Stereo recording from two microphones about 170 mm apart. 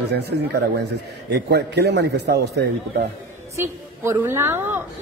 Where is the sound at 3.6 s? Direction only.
15° right (ahead or behind).